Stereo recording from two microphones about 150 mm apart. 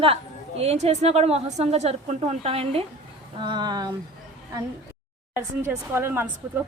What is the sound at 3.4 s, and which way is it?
Speech, 30° right (ahead or behind).